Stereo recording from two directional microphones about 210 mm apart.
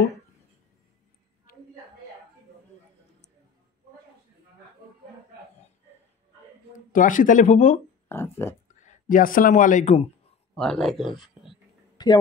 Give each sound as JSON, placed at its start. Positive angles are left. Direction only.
{"t": 6.9, "sound": "speech", "side_deg": 40}
{"t": 8.1, "sound": "speech", "side_deg": 10}
{"t": 8.8, "sound": "a man's voice", "side_deg": 40}
{"t": 10.5, "sound": "speech", "side_deg": 5}
{"t": 12.0, "sound": "a sound", "side_deg": 20}